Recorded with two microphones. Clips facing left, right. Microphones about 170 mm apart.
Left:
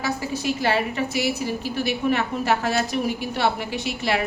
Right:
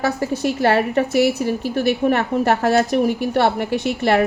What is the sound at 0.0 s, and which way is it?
A woman's voice, 55° right (ahead or behind).